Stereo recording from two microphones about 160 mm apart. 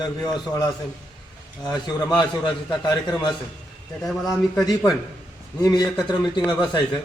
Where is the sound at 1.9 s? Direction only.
25° left (ahead or behind).